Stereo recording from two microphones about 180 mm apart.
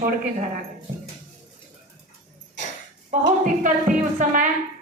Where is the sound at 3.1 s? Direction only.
45° right (ahead or behind).